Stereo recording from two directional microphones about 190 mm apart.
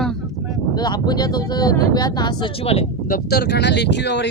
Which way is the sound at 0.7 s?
20° left (ahead or behind).